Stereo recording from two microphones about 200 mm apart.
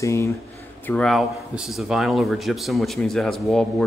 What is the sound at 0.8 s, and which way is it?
Speech, 5° left (ahead or behind).